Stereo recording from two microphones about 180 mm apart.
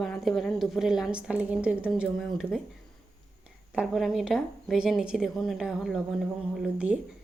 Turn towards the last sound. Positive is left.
turn(degrees=-5)  # may be behind; listen again after turning